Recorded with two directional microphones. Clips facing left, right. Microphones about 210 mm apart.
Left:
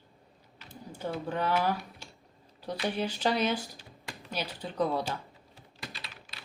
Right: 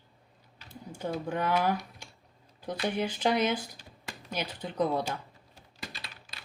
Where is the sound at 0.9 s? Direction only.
15° right (ahead or behind).